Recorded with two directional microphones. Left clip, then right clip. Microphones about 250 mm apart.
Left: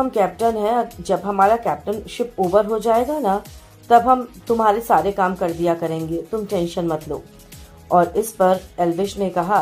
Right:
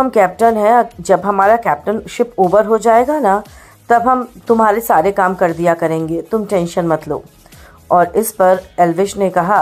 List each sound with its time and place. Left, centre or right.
0.0 s a woman's voice: right